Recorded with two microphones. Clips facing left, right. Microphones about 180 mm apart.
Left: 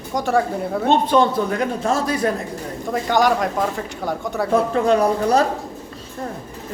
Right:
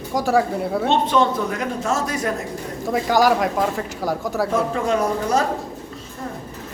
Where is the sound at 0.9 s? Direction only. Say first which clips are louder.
Left 3 dB; 35° left (ahead or behind).